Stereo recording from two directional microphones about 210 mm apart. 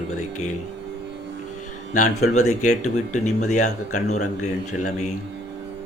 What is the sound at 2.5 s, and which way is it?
Speech, 35° left (ahead or behind).